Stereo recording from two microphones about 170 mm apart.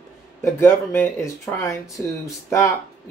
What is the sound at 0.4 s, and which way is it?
Speech, 15° left (ahead or behind).